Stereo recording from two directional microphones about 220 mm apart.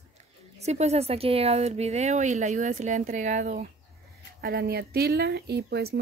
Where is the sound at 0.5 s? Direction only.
30° right (ahead or behind).